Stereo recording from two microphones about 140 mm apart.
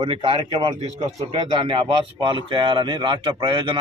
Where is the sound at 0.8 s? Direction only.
50° right (ahead or behind).